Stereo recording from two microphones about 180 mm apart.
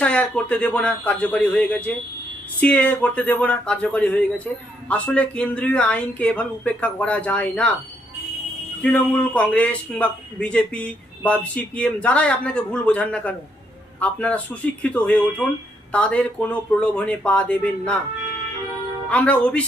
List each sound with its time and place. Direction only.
0.0 s a man's voice: 5° left (ahead or behind)
8.8 s a man's voice: 5° left (ahead or behind)
19.0 s a man's voice: 5° left (ahead or behind)